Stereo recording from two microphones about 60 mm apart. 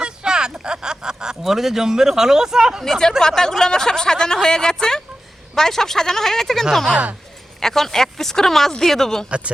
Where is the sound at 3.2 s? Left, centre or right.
Centre.